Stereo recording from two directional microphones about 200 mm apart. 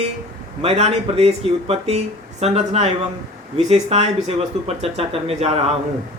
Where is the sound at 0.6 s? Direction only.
30° right (ahead or behind).